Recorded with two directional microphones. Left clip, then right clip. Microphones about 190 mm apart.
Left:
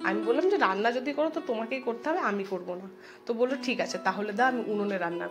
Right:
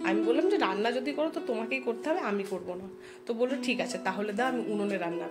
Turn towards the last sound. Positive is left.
turn(degrees=-5)  # may be behind; listen again after turning